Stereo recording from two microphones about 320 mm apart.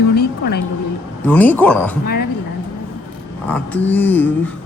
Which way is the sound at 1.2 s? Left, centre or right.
Centre.